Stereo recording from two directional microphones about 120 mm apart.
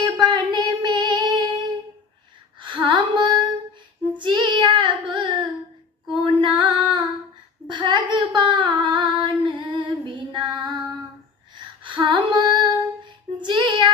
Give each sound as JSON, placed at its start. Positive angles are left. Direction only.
{"t": 0.0, "sound": "female singing", "side_deg": -40}
{"t": 2.6, "sound": "female singing", "side_deg": -40}
{"t": 4.2, "sound": "child singing", "side_deg": -40}
{"t": 6.2, "sound": "female singing", "side_deg": -40}